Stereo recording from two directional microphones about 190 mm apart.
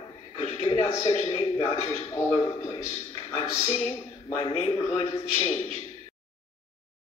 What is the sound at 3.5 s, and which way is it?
A man's voice, 30° left (ahead or behind).